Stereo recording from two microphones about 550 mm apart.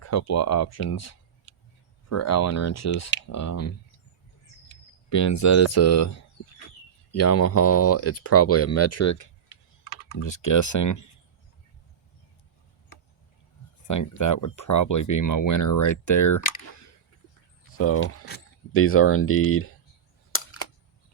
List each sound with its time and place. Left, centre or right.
0.0 s speech: left
5.0 s speech: left
13.8 s speech: left
17.7 s speech: left
20.3 s single-lens reflex camera: left